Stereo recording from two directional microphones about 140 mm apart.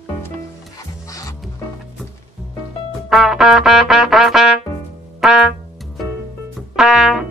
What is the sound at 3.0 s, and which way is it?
Music, centre (ahead or behind).